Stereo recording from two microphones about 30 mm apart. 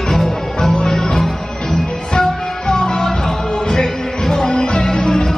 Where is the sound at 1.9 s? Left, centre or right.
Left.